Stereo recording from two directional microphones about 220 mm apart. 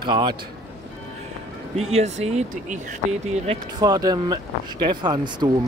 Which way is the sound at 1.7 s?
30° right (ahead or behind).